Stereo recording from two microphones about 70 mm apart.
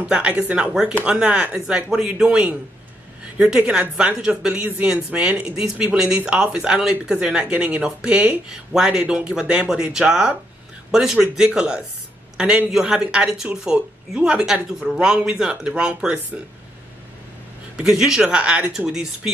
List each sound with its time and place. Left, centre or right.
0.0 s a man's voice: centre
17.7 s speech: centre